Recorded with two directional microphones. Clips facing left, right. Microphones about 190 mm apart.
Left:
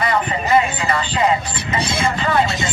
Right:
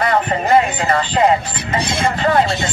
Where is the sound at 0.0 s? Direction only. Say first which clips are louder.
Right 3 dB; 55° right (ahead or behind).